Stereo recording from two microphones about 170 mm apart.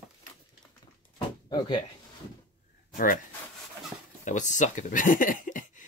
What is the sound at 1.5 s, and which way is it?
Speech, 25° left (ahead or behind).